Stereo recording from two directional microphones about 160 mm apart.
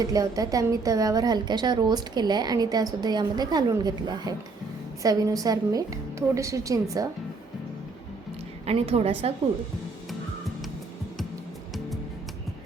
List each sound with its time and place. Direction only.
0.0 s a woman's voice: 20° right (ahead or behind)
8.6 s a woman's voice: 40° right (ahead or behind)